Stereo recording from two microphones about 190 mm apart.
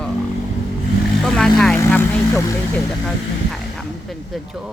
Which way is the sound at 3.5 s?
Centre (ahead or behind).